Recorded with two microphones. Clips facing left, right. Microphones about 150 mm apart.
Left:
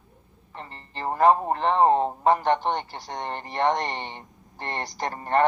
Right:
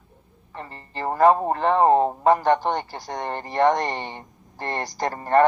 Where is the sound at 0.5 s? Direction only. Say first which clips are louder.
Right 4 dB; 45° right (ahead or behind).